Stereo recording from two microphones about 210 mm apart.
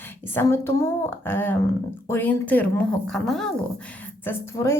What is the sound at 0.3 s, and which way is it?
A woman's voice, 10° left (ahead or behind).